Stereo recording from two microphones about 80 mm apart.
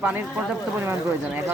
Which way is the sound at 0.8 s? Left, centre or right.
Right.